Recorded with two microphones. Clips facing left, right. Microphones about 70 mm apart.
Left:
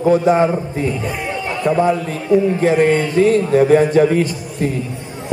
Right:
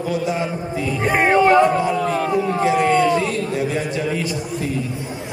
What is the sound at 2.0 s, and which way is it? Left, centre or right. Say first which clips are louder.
Speech: left 4 dB; right.